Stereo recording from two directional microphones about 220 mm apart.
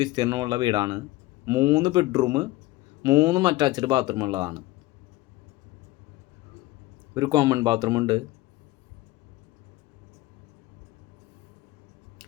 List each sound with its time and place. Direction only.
0.0 s speech: 20° right (ahead or behind)
7.1 s speech: 20° right (ahead or behind)